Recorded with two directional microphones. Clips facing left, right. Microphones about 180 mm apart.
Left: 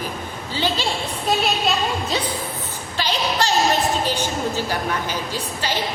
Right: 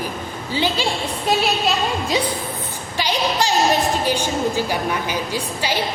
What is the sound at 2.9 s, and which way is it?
A woman's voice, 15° right (ahead or behind).